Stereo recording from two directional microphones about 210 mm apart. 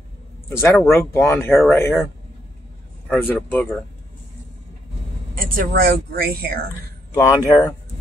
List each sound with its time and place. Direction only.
0.5 s speech: 10° left (ahead or behind)
3.1 s speech: 5° left (ahead or behind)
5.3 s speech: 45° right (ahead or behind)
7.2 s speech: 15° left (ahead or behind)